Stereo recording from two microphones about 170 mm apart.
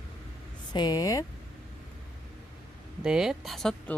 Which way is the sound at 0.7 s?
25° left (ahead or behind).